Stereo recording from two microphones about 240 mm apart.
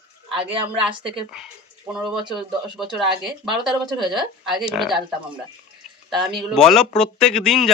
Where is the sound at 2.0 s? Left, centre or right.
Centre.